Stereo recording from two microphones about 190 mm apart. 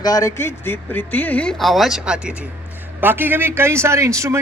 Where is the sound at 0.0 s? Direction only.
15° left (ahead or behind).